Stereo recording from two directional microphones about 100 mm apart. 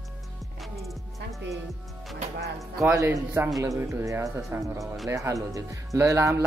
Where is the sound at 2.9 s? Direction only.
30° right (ahead or behind).